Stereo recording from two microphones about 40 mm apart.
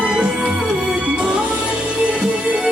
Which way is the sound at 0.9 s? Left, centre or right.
Right.